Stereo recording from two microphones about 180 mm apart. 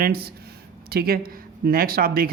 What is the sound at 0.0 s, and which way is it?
Speech, 60° right (ahead or behind).